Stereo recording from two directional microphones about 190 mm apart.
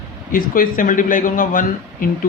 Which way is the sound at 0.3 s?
50° left (ahead or behind).